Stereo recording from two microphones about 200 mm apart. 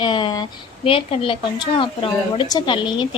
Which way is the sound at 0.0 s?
25° left (ahead or behind).